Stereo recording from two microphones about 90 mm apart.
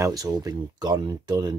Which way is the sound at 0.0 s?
40° right (ahead or behind).